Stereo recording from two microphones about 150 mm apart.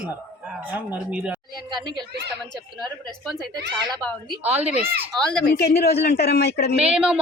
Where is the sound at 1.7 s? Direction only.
30° right (ahead or behind).